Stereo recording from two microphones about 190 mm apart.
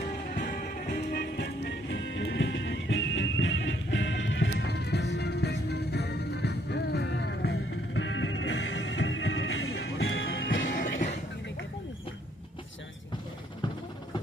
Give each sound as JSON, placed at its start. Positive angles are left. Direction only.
{"t": 0.3, "sound": "music", "side_deg": 50}
{"t": 10.8, "sound": "music", "side_deg": 40}